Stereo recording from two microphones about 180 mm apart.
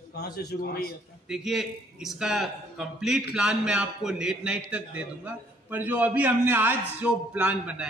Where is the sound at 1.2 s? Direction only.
Centre (ahead or behind).